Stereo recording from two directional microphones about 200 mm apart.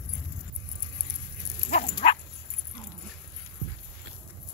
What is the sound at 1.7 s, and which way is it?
Dog, 40° left (ahead or behind).